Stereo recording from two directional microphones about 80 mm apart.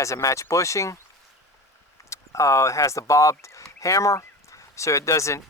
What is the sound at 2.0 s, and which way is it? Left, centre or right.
Speech, left.